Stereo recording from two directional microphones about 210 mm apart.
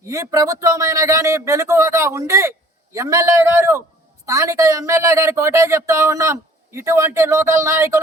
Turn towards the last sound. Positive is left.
turn(degrees=-15)  # may be behind; listen again after turning